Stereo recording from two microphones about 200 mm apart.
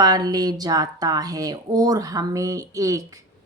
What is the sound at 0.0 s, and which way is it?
A woman's voice, 20° right (ahead or behind).